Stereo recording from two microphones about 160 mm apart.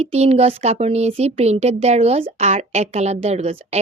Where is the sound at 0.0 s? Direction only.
40° right (ahead or behind).